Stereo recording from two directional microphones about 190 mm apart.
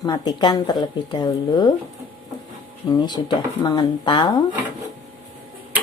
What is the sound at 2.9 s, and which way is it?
A woman's voice, 20° left (ahead or behind).